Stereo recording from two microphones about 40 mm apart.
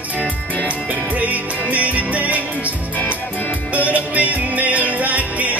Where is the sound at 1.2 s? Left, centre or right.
Right.